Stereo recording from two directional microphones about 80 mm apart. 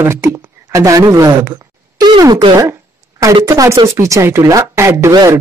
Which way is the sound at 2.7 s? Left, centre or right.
Right.